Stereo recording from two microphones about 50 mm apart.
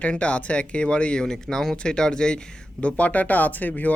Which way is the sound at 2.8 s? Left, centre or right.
Left.